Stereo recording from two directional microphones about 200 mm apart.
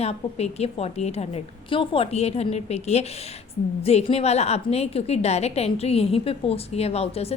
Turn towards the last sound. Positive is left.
turn(degrees=30)  # may be behind; listen again after turning